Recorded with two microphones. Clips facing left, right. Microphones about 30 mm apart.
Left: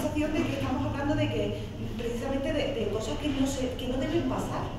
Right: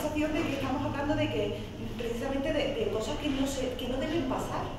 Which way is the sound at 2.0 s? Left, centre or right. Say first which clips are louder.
Left 1 dB; right.